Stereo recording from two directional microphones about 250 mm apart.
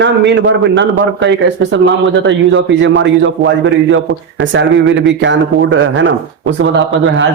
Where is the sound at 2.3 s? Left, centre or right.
Right.